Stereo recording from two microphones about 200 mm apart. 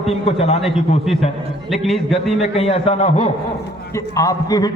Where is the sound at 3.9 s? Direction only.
15° left (ahead or behind).